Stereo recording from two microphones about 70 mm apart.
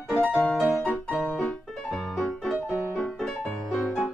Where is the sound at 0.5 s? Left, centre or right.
Centre.